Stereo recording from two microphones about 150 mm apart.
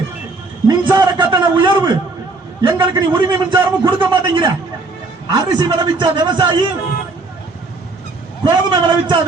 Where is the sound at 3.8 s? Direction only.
35° right (ahead or behind).